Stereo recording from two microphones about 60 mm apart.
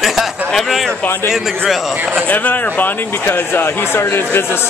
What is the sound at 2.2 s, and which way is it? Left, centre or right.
Speech, left.